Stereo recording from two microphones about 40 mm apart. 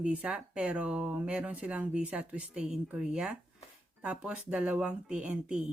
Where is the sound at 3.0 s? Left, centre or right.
Right.